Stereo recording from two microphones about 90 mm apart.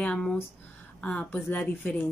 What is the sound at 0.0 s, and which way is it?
A woman's voice, 10° left (ahead or behind).